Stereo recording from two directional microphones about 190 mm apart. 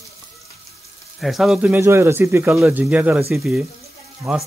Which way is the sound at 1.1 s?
Centre (ahead or behind).